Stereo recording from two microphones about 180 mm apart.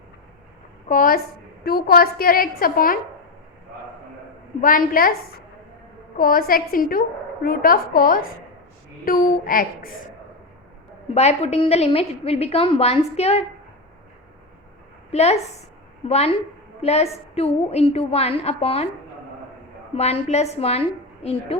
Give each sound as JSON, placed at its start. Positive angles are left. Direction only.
{"t": 0.9, "sound": "a child's voice", "side_deg": 50}
{"t": 4.6, "sound": "a child's voice", "side_deg": 50}
{"t": 6.1, "sound": "a child's voice", "side_deg": 55}
{"t": 11.1, "sound": "a woman's voice", "side_deg": 35}
{"t": 15.1, "sound": "a woman's voice", "side_deg": 35}
{"t": 20.0, "sound": "a woman's voice", "side_deg": 35}